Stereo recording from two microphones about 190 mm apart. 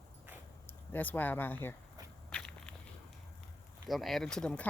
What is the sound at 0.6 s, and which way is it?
Speech, 10° left (ahead or behind).